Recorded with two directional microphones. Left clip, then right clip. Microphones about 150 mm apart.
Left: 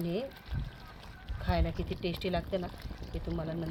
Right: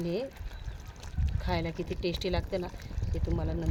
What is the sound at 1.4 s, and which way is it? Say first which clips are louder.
Speech: right 1 dB; 55° right (ahead or behind).